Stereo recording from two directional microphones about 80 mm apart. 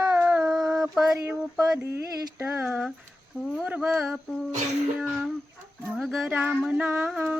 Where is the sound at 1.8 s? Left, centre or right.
Right.